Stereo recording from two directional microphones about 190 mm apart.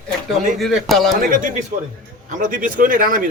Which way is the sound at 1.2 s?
45° right (ahead or behind).